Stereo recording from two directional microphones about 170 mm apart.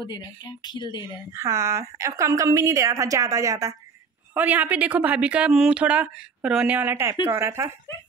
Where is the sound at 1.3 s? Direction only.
20° right (ahead or behind).